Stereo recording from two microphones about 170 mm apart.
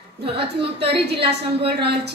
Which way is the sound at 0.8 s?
75° right (ahead or behind).